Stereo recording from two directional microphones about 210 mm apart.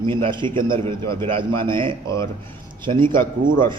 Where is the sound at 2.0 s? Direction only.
15° left (ahead or behind).